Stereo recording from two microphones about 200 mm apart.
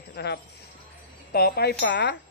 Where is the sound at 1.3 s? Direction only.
50° left (ahead or behind).